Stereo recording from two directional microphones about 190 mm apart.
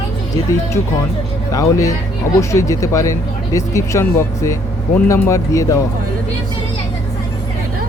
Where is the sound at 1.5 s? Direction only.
15° left (ahead or behind).